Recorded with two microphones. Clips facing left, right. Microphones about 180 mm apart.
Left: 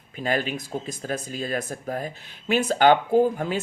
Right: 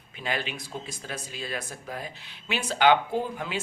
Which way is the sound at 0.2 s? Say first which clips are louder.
Left 6 dB; 45° left (ahead or behind).